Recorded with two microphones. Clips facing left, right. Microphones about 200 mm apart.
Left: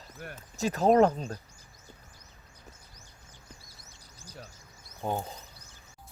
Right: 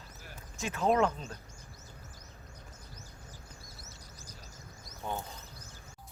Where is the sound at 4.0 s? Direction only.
30° left (ahead or behind).